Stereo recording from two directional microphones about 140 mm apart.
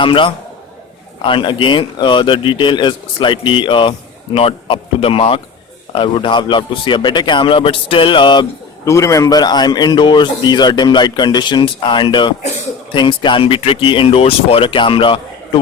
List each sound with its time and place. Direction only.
0.0 s a man's voice: 40° left (ahead or behind)
8.8 s a man's voice: 20° left (ahead or behind); by 15.6 s 35° left (ahead or behind)